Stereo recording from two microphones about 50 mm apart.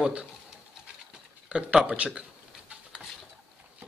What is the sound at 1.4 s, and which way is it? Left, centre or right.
Speech, right.